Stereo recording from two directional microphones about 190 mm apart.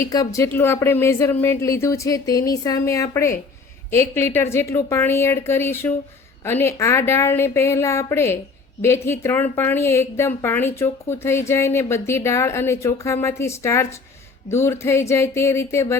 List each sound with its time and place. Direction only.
0.0 s a woman's voice: 15° left (ahead or behind)